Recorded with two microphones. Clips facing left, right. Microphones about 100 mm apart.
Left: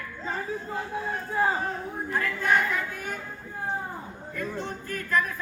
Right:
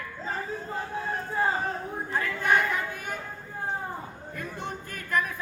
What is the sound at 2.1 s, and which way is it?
Speech, 20° right (ahead or behind).